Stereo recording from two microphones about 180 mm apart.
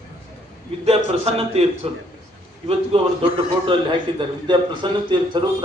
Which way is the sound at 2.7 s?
30° right (ahead or behind).